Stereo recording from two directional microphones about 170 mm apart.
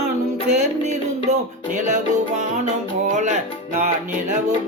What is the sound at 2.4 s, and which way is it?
Music, 45° right (ahead or behind).